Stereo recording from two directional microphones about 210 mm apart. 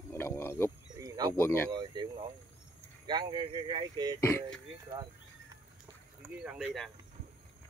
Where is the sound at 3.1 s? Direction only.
20° right (ahead or behind).